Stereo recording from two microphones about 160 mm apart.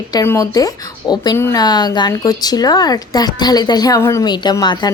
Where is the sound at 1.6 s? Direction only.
25° left (ahead or behind).